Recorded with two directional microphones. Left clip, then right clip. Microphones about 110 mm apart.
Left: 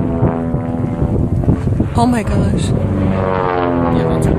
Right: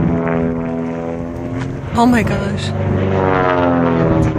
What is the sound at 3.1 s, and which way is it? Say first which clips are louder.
Vehicle: right 3 dB; 15° left (ahead or behind).